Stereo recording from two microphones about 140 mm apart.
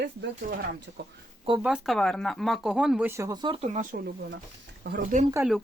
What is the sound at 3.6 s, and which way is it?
Speech, 60° right (ahead or behind).